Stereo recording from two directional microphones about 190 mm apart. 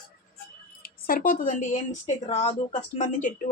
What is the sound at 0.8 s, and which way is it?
Speech, 50° left (ahead or behind).